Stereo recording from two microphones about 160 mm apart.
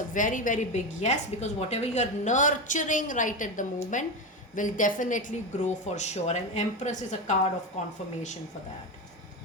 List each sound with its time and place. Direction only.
0.1 s a woman's voice: 55° left (ahead or behind)